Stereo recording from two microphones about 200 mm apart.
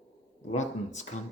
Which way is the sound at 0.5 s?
35° left (ahead or behind).